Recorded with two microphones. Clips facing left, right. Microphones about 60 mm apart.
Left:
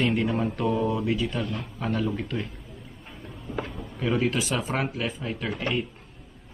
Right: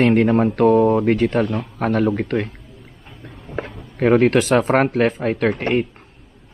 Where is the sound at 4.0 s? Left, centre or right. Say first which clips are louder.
Right 11 dB; right.